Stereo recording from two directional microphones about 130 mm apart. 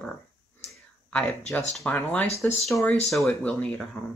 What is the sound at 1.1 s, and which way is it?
Speech, 10° left (ahead or behind).